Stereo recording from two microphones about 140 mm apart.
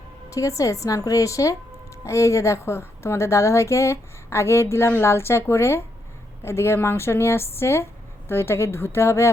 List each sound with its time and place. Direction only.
0.3 s a woman's voice: 25° left (ahead or behind)